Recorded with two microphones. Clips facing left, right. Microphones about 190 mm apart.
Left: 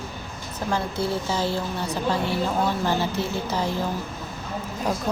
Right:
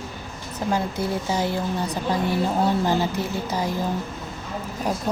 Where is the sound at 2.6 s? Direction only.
15° right (ahead or behind).